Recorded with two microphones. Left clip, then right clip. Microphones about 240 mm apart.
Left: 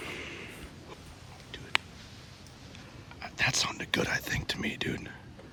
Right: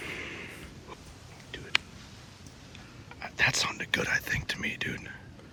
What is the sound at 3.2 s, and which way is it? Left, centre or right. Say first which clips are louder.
Whispering: right 2 dB; centre.